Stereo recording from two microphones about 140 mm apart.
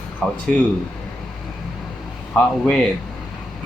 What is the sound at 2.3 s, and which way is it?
Speech, 5° left (ahead or behind).